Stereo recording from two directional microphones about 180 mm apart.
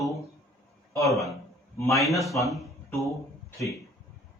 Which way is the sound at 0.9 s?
15° left (ahead or behind).